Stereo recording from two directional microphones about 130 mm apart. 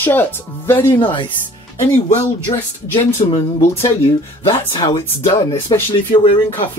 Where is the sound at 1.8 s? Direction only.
55° left (ahead or behind).